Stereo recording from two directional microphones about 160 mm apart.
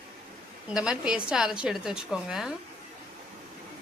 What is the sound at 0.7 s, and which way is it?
A woman's voice, 5° right (ahead or behind).